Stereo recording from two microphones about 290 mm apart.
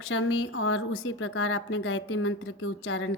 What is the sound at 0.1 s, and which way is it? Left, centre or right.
Speech, left.